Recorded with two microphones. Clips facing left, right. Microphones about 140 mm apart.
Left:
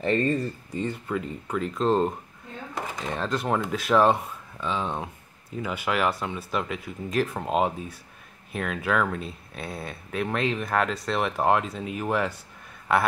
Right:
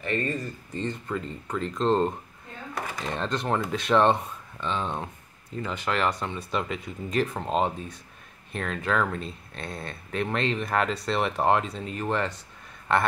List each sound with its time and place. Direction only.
0.0 s speech: 30° left (ahead or behind)
0.7 s speech: 5° left (ahead or behind)